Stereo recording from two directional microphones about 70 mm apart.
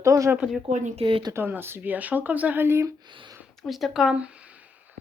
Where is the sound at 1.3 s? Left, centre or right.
Right.